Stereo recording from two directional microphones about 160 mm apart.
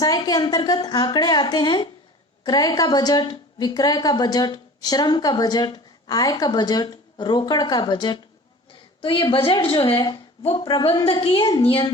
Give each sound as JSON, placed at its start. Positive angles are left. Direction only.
{"t": 0.0, "sound": "a woman's voice", "side_deg": 25}